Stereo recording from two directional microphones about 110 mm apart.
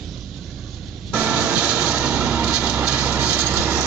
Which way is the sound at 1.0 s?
10° right (ahead or behind).